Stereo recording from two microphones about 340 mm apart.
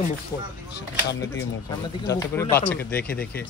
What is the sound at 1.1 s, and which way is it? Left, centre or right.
Speech, centre.